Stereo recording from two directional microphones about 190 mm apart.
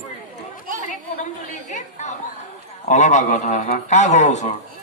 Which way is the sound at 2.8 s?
40° left (ahead or behind).